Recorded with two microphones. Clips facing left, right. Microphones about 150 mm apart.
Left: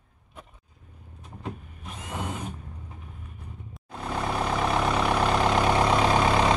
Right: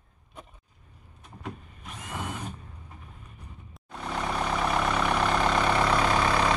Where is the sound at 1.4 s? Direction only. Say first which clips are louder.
Left 2 dB; 20° left (ahead or behind).